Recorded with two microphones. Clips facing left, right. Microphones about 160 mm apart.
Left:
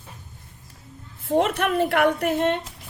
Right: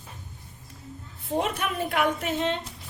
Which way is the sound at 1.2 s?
75° left (ahead or behind).